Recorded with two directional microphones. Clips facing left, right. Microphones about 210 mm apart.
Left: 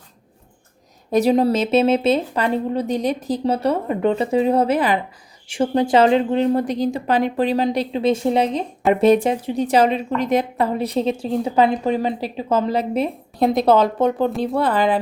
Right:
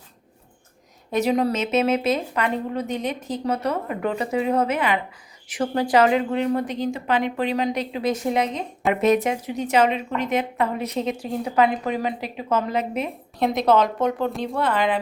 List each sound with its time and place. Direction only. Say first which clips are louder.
1.1 s speech: left 5 dB; 35° left (ahead or behind)